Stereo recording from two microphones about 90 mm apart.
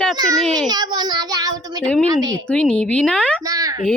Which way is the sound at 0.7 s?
50° right (ahead or behind).